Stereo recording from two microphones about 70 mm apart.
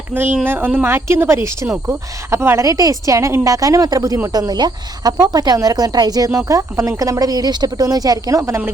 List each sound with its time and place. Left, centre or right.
0.1 s a woman's voice: right
2.6 s speech: right